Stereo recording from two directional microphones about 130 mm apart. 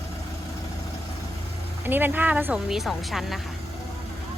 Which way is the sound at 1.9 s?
15° right (ahead or behind).